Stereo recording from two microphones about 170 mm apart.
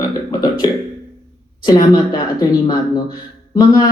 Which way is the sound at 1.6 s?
25° left (ahead or behind).